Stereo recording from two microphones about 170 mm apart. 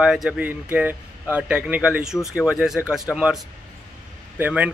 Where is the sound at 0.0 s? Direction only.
5° right (ahead or behind).